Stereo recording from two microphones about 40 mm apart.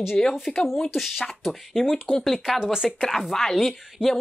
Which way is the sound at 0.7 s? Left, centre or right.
Centre.